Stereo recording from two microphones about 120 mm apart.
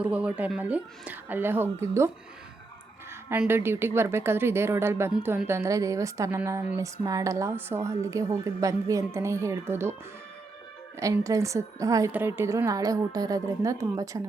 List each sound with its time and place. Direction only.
0.0 s a woman's voice: 10° right (ahead or behind)
3.2 s a woman's voice: 20° right (ahead or behind)
11.0 s a woman's voice: 25° right (ahead or behind)